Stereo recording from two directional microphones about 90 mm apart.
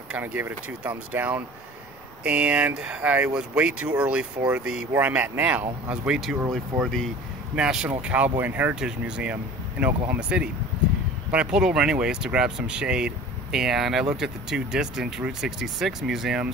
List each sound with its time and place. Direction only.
0.2 s speech: 20° right (ahead or behind)
4.9 s speech: 20° right (ahead or behind)
6.5 s speech: 5° left (ahead or behind)
7.5 s speech: 10° right (ahead or behind)
8.7 s speech: 10° right (ahead or behind)